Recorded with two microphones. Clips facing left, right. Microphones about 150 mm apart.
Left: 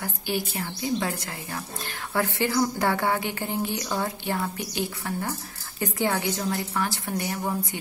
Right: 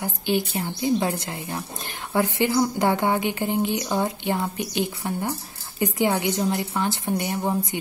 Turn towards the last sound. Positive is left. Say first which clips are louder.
# right 4 dB
turn(degrees=-20)  # may be behind; listen again after turning